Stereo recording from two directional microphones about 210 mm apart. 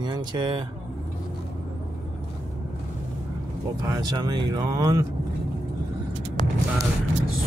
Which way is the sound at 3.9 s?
20° right (ahead or behind).